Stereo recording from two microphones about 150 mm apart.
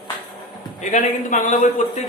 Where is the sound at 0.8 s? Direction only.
55° left (ahead or behind).